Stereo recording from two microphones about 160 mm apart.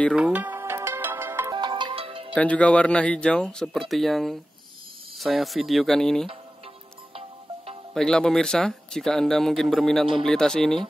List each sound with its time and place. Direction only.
0.1 s music: 10° right (ahead or behind)
1.5 s music: 30° right (ahead or behind)
2.3 s speech: 10° left (ahead or behind)
7.9 s speech: 5° left (ahead or behind)